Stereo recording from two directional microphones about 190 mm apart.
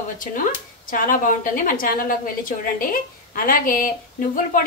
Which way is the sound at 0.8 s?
45° left (ahead or behind).